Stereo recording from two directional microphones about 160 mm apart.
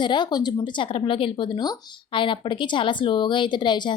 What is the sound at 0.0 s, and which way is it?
A woman's voice, 30° left (ahead or behind).